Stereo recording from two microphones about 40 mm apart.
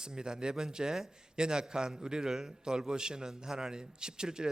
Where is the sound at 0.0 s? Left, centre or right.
Centre.